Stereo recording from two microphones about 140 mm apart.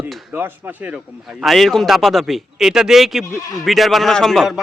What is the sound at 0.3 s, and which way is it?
Speech, 15° right (ahead or behind).